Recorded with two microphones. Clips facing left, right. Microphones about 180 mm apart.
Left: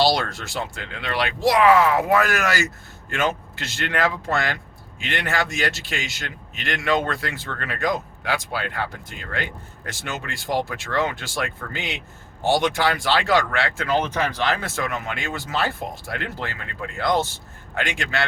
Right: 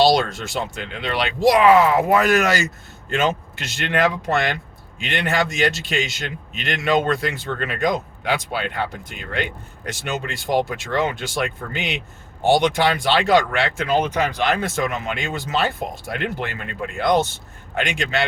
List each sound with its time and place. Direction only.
0.0 s a man's voice: 20° right (ahead or behind)